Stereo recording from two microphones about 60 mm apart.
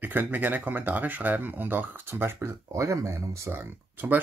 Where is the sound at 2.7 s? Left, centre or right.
Right.